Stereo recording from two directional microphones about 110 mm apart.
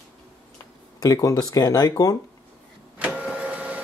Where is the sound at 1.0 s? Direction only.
30° left (ahead or behind).